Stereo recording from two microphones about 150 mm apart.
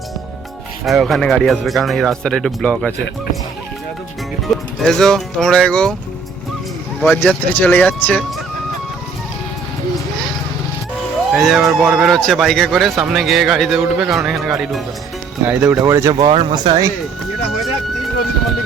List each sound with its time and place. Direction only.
0.9 s a man's voice: centre (ahead or behind)
4.4 s a man's voice: centre (ahead or behind)
7.0 s speech: 5° left (ahead or behind)
11.3 s a man's voice: centre (ahead or behind)
15.8 s speech: 20° right (ahead or behind)
16.3 s speech: 35° right (ahead or behind)